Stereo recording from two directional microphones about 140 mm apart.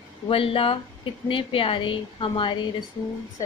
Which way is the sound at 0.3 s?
40° left (ahead or behind).